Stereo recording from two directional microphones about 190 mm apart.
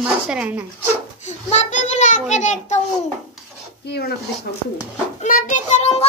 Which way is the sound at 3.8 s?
55° left (ahead or behind).